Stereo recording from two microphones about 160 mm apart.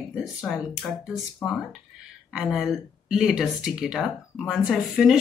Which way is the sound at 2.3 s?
5° right (ahead or behind).